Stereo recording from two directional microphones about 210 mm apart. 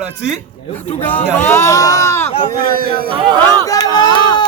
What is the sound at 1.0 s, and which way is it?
Speech, 10° left (ahead or behind).